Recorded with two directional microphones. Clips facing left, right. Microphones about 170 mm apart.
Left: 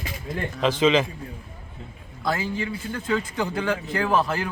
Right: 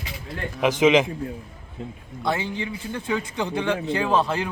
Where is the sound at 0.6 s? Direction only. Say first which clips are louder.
Right 2 dB; 20° right (ahead or behind).